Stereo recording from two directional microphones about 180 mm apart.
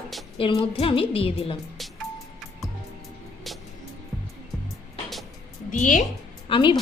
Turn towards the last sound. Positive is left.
turn(degrees=25)  # may be behind; listen again after turning